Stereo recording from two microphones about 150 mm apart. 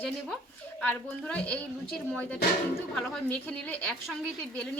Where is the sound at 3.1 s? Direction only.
10° left (ahead or behind).